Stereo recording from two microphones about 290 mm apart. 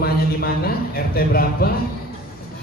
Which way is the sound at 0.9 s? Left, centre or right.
Left.